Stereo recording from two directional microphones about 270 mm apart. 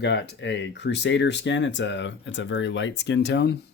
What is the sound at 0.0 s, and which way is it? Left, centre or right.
Speech, left.